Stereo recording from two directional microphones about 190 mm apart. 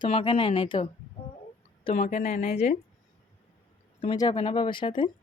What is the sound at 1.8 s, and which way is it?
Speech, 35° left (ahead or behind).